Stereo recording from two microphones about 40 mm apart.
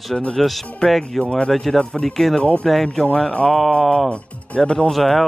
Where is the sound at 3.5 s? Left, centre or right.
Centre.